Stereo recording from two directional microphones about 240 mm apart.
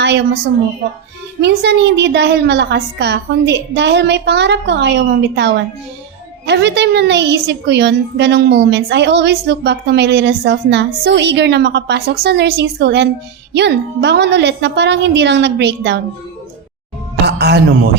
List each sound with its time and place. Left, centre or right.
1.4 s a woman's voice: right
17.2 s speech: right